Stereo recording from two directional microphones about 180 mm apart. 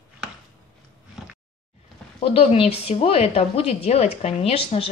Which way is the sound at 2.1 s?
30° left (ahead or behind).